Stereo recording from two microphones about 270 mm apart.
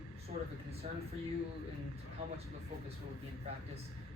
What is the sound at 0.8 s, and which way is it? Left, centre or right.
Speech, right.